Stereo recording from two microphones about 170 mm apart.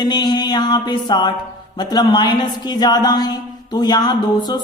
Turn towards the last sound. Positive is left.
turn(degrees=25)  # may be behind; listen again after turning